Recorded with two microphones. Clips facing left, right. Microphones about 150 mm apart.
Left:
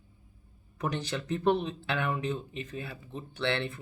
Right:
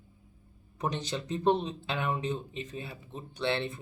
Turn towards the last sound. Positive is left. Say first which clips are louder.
# even
turn(degrees=-20)  # may be behind; listen again after turning